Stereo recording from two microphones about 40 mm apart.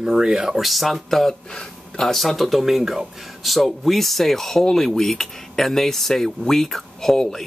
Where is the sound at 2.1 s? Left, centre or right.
Centre.